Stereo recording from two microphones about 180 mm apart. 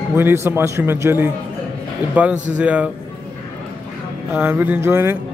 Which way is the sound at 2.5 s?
5° right (ahead or behind).